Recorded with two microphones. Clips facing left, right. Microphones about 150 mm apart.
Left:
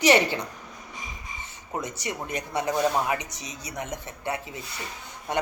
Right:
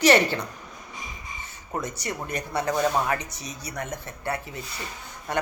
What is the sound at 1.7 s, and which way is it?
Speech, 20° left (ahead or behind).